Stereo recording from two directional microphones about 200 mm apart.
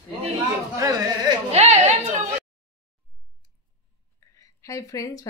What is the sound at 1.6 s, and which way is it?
Speech, 35° right (ahead or behind).